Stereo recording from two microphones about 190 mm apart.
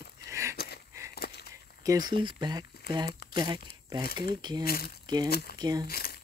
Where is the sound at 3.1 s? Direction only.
55° left (ahead or behind).